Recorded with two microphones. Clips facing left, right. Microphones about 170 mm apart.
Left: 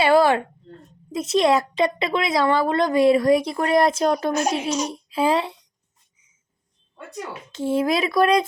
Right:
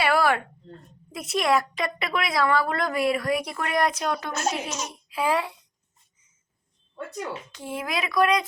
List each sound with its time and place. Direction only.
0.0 s a sound: 25° left (ahead or behind)
1.1 s speech: 25° left (ahead or behind)
4.3 s a child's voice: 15° left (ahead or behind)
4.9 s a child's voice: 30° left (ahead or behind)
7.5 s speech: 25° left (ahead or behind)